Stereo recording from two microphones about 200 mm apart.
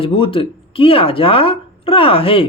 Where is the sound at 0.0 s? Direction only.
25° left (ahead or behind).